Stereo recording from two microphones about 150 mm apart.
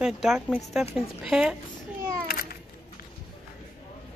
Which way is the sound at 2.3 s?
90° left.